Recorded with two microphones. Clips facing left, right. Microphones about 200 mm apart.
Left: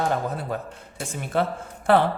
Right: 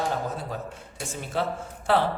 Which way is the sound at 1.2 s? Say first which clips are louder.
Left 4 dB; 55° left (ahead or behind).